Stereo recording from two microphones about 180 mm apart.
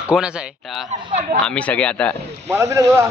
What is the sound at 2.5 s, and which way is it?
Speech, 15° right (ahead or behind).